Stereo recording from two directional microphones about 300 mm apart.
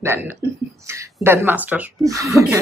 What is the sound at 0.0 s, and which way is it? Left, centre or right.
Speech, centre.